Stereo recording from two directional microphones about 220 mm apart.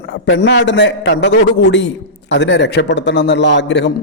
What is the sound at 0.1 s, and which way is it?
Speech, 55° left (ahead or behind).